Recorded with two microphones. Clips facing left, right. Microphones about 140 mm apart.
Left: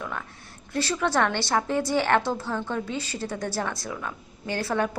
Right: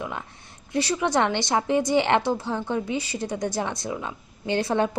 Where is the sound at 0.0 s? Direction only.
20° right (ahead or behind).